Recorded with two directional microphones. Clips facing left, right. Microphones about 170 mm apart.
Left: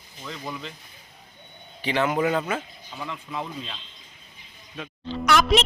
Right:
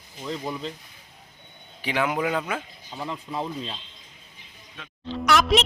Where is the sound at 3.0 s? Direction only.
30° right (ahead or behind).